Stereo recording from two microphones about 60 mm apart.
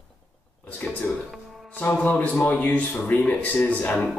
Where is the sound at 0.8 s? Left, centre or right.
Left.